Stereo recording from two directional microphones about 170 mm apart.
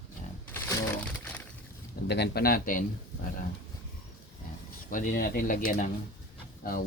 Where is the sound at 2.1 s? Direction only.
75° left (ahead or behind); by 3.3 s 55° left (ahead or behind).